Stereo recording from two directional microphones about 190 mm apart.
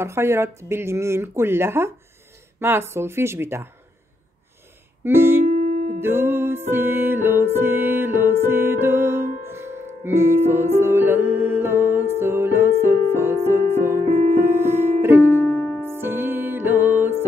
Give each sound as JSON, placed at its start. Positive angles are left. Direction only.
{"t": 0.0, "sound": "speech", "side_deg": -15}
{"t": 5.0, "sound": "music", "side_deg": -10}
{"t": 5.6, "sound": "music", "side_deg": -40}
{"t": 5.9, "sound": "music", "side_deg": -10}
{"t": 15.5, "sound": "music", "side_deg": 5}
{"t": 15.8, "sound": "music", "side_deg": -10}